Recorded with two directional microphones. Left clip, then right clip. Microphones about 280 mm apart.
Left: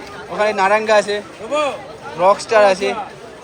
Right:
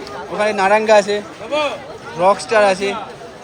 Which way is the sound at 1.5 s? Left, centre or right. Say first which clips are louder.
Even; left.